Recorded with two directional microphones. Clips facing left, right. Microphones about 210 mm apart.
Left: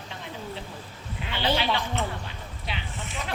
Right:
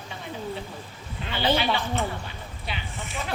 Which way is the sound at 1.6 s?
10° right (ahead or behind).